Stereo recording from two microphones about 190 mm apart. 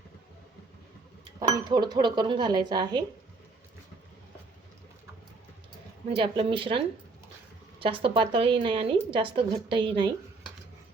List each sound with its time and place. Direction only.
1.4 s speech: 20° right (ahead or behind)
6.1 s speech: 30° right (ahead or behind)